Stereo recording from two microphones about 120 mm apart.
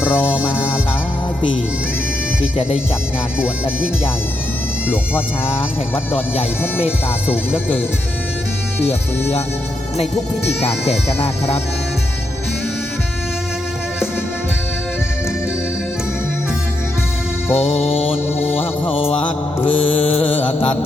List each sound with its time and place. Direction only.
0.0 s music: 15° left (ahead or behind)
2.6 s mantra: 55° left (ahead or behind)
4.9 s speech: 20° left (ahead or behind)
8.8 s music: 60° left (ahead or behind)
17.5 s music: 55° left (ahead or behind)
19.6 s mantra: 55° left (ahead or behind)